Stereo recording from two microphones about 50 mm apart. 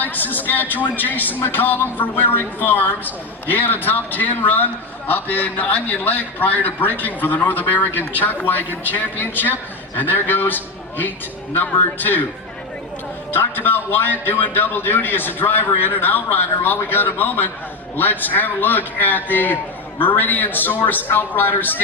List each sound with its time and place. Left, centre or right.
0.0 s a woman's voice: left
13.3 s a man's voice: left